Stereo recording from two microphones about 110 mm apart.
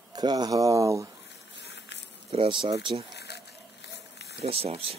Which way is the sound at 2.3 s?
50° right (ahead or behind).